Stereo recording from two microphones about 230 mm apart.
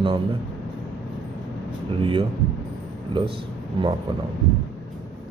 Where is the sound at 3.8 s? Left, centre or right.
Right.